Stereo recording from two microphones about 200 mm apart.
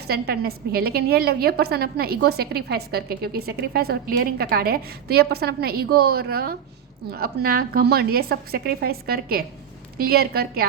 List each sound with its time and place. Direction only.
0.1 s a woman's voice: 50° right (ahead or behind)